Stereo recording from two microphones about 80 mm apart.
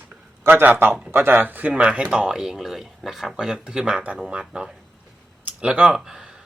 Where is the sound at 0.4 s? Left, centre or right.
Right.